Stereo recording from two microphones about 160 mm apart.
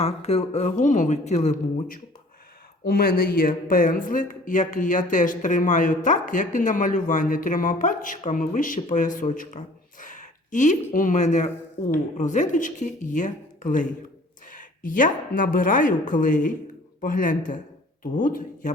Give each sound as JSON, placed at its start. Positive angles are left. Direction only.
{"t": 0.0, "sound": "speech", "side_deg": 40}
{"t": 2.8, "sound": "speech", "side_deg": 70}